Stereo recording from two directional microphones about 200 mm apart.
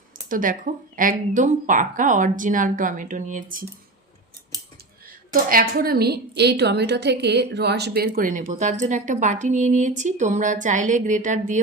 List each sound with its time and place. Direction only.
0.3 s a woman's voice: 45° right (ahead or behind)
4.5 s scissors: 20° right (ahead or behind)
5.3 s a woman's voice: 45° right (ahead or behind)